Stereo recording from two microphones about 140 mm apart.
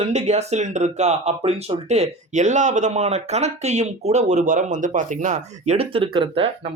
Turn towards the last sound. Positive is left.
turn(degrees=-40)  # may be behind; listen again after turning